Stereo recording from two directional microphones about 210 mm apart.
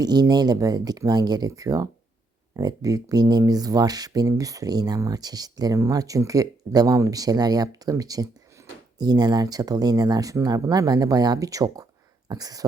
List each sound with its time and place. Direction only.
0.0 s speech: 20° right (ahead or behind)